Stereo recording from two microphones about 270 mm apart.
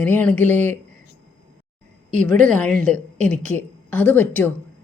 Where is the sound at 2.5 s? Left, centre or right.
Centre.